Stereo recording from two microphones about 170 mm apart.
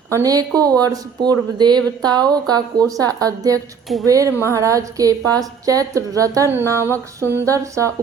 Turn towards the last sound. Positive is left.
turn(degrees=-20)  # may be behind; listen again after turning